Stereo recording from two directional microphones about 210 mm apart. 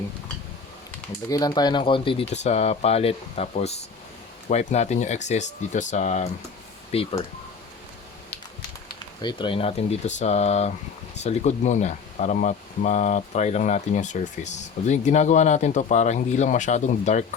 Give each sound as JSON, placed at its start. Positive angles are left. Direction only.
{"t": 1.3, "sound": "speech", "side_deg": 20}
{"t": 9.2, "sound": "speech", "side_deg": 25}